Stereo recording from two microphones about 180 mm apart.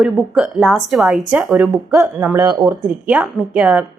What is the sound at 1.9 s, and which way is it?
A woman's voice, 15° right (ahead or behind).